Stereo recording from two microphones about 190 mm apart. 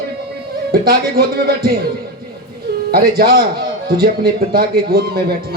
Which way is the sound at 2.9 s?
55° right (ahead or behind).